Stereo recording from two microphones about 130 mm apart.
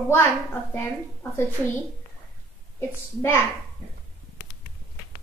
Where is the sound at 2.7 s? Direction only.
20° left (ahead or behind).